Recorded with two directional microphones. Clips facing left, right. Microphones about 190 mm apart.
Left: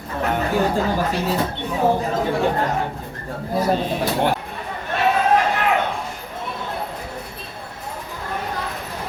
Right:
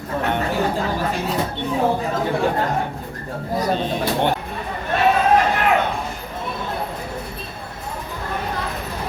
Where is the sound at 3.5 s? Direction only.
5° left (ahead or behind).